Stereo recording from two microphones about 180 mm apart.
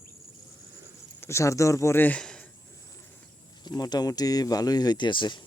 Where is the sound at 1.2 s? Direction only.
15° left (ahead or behind).